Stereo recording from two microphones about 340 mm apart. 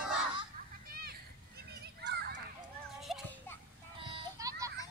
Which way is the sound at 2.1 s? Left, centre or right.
Right.